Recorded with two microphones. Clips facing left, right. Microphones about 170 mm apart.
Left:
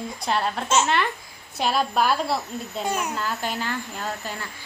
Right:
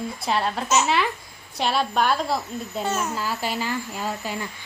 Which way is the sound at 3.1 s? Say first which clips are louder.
Right 1 dB; 5° right (ahead or behind).